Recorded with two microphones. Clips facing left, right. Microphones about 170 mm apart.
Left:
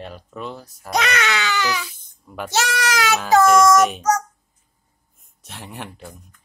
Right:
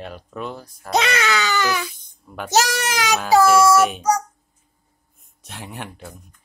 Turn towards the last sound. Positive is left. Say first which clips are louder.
# even
turn(degrees=0)  # may be behind; listen again after turning